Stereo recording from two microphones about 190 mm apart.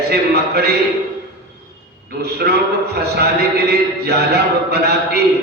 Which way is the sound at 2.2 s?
55° right (ahead or behind).